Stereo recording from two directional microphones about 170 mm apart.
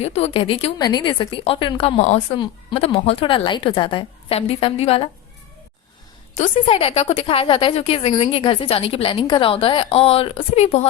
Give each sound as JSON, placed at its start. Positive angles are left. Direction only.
{"t": 0.0, "sound": "a woman's voice", "side_deg": 40}
{"t": 2.0, "sound": "a woman's voice", "side_deg": 40}
{"t": 6.7, "sound": "a woman's voice", "side_deg": 35}